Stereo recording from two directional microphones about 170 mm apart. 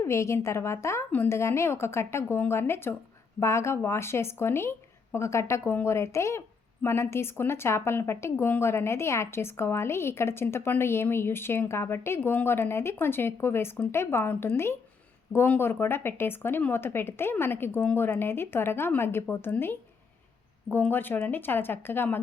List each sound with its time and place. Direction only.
0.0 s speech: 15° left (ahead or behind)